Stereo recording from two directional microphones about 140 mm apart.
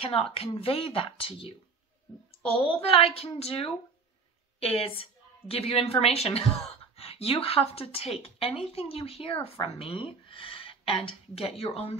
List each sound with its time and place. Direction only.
0.0 s a woman's voice: 40° left (ahead or behind)